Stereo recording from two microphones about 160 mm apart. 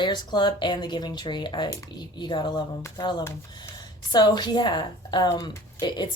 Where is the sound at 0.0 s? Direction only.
30° left (ahead or behind).